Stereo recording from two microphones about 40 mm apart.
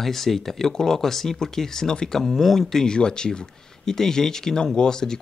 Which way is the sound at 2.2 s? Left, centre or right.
Centre.